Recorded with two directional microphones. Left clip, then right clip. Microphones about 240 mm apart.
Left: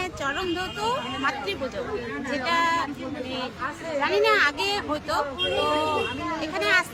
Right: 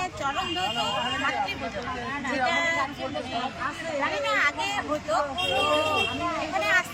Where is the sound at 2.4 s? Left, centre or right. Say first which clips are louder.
Left 3 dB; left.